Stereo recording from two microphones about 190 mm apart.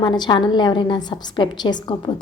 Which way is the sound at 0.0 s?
25° left (ahead or behind).